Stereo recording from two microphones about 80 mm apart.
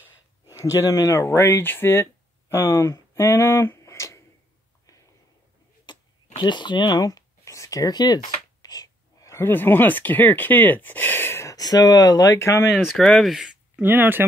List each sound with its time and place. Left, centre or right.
0.5 s speech: left
5.9 s a sound: left
7.1 s a sound: left
9.2 s speech: left
11.5 s speech: left
12.7 s speech: centre
13.7 s speech: right